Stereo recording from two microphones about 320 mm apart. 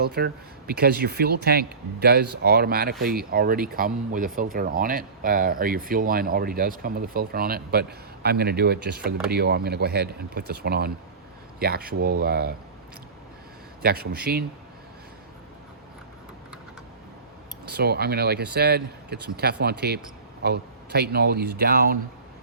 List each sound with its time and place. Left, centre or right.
0.0 s speech: right
13.8 s speech: right
17.7 s speech: right